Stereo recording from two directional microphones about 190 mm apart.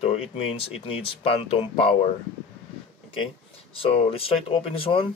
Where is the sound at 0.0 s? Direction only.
35° left (ahead or behind).